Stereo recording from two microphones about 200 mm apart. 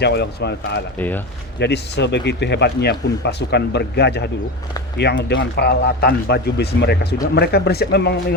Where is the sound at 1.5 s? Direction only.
55° left (ahead or behind).